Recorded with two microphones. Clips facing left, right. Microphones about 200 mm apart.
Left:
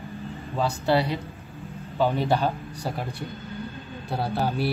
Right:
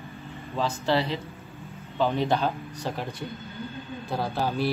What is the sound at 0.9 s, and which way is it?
Speech, 10° left (ahead or behind).